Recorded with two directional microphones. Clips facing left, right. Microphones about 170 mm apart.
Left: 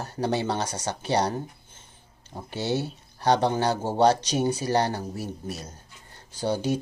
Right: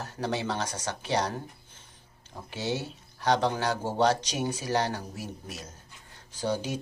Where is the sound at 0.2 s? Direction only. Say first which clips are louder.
Left 4 dB; 35° left (ahead or behind).